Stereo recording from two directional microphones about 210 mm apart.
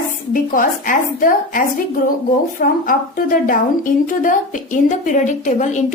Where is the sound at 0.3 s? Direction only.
40° left (ahead or behind).